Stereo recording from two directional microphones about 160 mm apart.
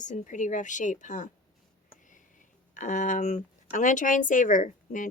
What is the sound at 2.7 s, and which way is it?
A woman's voice, 50° left (ahead or behind).